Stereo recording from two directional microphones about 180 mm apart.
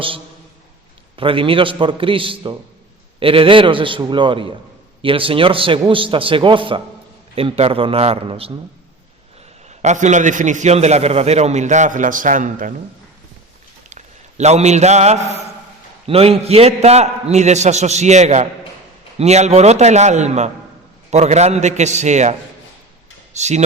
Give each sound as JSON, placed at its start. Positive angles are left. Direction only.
{"t": 1.1, "sound": "a man's voice", "side_deg": -30}
{"t": 9.6, "sound": "a man's voice", "side_deg": -40}
{"t": 13.9, "sound": "a man's voice", "side_deg": -40}